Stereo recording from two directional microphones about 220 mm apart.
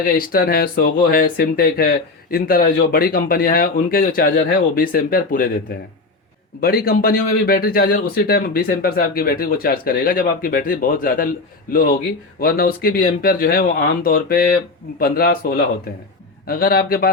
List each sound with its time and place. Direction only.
0.2 s a man's voice: 40° left (ahead or behind)
12.4 s a man's voice: 45° left (ahead or behind)